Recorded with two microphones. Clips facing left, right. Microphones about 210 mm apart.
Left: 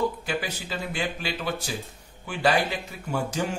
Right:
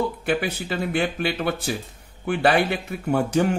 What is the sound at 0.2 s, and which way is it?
A man's voice, 60° right (ahead or behind).